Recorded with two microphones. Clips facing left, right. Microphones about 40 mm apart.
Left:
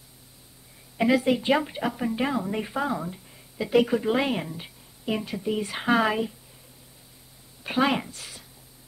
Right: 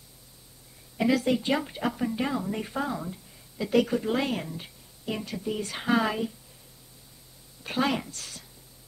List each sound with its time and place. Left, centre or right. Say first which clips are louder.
0.9 s a woman's voice: left 3 dB; centre
7.6 s a woman's voice: left 3 dB; centre